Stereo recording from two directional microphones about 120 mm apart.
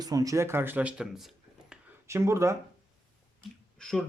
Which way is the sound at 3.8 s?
5° left (ahead or behind).